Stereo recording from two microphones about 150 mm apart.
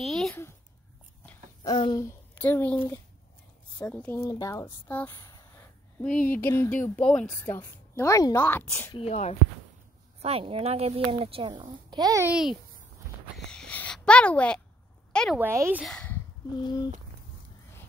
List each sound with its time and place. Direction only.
0.0 s a sound: centre (ahead or behind)
1.6 s speech: 30° left (ahead or behind)
2.0 s speech: 10° left (ahead or behind)
4.0 s speech: 20° left (ahead or behind)
5.1 s a sound: 25° left (ahead or behind)
5.9 s a woman's voice: 10° left (ahead or behind)
8.9 s speech: 45° left (ahead or behind)
10.2 s speech: 40° right (ahead or behind)
11.9 s a child's voice: 25° right (ahead or behind)
12.3 s a child's voice: 5° right (ahead or behind)
13.5 s a sound: 5° left (ahead or behind)
15.3 s speech: 15° right (ahead or behind)
15.8 s a child's voice: centre (ahead or behind)
16.6 s speech: 30° left (ahead or behind)